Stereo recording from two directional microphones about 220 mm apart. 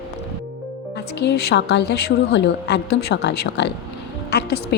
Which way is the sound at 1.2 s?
50° left (ahead or behind).